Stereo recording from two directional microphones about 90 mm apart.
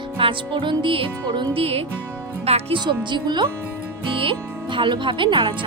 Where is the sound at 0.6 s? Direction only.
70° right (ahead or behind); by 1.8 s 90° right.